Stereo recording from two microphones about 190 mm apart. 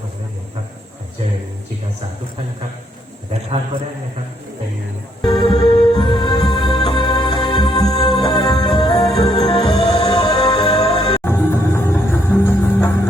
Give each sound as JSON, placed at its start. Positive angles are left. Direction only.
{"t": 5.2, "sound": "music", "side_deg": 25}
{"t": 11.2, "sound": "music", "side_deg": 10}